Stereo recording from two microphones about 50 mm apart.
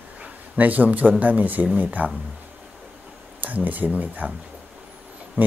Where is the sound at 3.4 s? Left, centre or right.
Right.